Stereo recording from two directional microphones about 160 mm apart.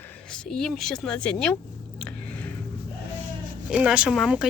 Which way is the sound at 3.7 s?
5° right (ahead or behind).